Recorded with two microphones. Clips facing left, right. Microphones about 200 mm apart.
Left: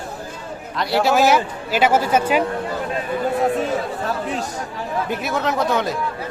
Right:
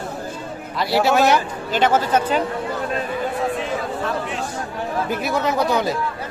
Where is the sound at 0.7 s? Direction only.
Centre (ahead or behind).